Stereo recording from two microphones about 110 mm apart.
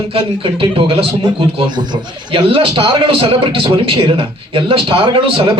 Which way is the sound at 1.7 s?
40° right (ahead or behind).